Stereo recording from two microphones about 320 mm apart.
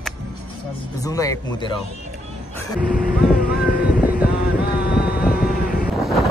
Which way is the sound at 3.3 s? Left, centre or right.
Left.